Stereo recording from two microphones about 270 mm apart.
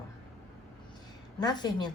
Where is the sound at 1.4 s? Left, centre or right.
Centre.